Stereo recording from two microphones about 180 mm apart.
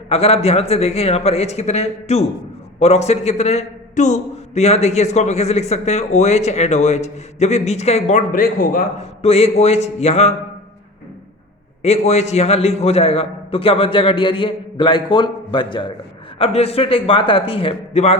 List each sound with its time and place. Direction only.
0.1 s a man's voice: 35° left (ahead or behind); by 8.8 s 50° left (ahead or behind)
9.2 s a man's voice: 35° left (ahead or behind)
11.8 s a man's voice: 35° left (ahead or behind)